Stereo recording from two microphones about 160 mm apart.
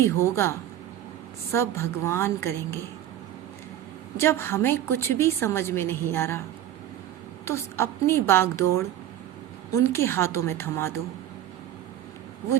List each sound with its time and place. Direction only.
0.0 s a woman's voice: 15° left (ahead or behind)
1.5 s a woman's voice: 15° left (ahead or behind)
4.2 s a woman's voice: 15° left (ahead or behind)
7.4 s a woman's voice: 15° left (ahead or behind)